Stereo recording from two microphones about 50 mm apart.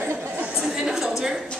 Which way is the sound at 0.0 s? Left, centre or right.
Right.